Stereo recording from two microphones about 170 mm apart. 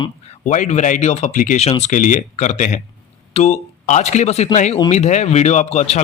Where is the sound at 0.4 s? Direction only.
45° left (ahead or behind).